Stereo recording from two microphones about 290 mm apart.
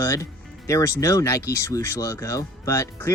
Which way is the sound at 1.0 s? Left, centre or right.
Centre.